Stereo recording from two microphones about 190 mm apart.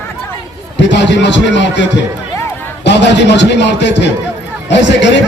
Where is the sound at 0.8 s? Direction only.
70° left (ahead or behind).